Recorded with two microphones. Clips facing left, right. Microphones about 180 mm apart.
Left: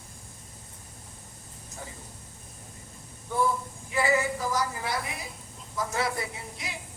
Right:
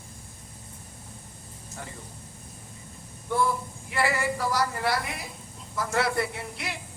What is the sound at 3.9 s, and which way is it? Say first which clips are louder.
Speech: left 1 dB; 75° right (ahead or behind).